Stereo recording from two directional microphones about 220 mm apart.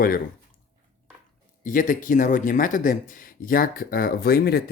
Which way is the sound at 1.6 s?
35° left (ahead or behind).